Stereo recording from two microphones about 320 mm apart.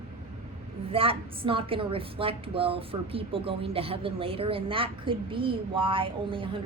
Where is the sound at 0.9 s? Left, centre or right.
Centre.